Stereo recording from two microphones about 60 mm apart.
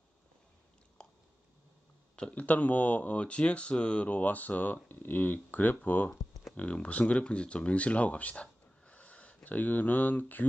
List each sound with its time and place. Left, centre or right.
1.0 s a sound: centre
2.1 s speech: centre
2.4 s speech: left